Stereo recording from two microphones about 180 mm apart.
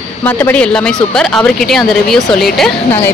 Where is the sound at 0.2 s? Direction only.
10° left (ahead or behind).